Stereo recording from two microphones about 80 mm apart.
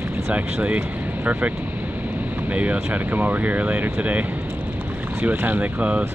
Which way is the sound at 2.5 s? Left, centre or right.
Centre.